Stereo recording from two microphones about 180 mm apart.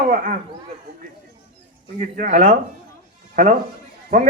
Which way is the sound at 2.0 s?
45° right (ahead or behind).